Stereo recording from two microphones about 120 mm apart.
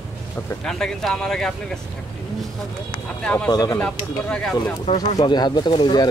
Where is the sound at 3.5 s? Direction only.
35° left (ahead or behind).